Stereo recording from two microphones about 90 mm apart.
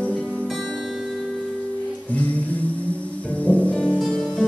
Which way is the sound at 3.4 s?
15° left (ahead or behind).